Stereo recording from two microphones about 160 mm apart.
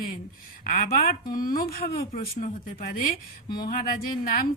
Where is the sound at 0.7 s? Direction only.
55° left (ahead or behind).